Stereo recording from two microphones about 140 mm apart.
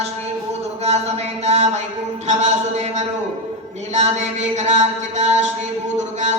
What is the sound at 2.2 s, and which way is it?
Music, 55° right (ahead or behind).